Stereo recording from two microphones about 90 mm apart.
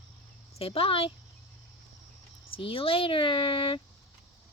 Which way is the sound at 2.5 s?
85° left.